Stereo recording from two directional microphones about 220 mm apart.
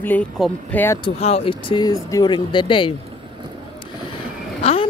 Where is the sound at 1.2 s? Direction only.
30° left (ahead or behind).